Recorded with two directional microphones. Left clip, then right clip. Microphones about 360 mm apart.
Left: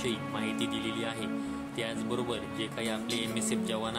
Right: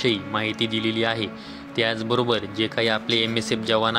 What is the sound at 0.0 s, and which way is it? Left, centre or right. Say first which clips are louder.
Speech: right 10 dB; left.